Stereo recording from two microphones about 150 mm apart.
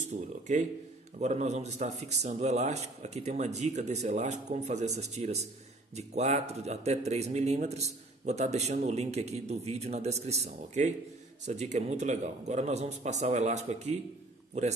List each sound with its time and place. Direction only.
0.0 s a man's voice: 55° right (ahead or behind)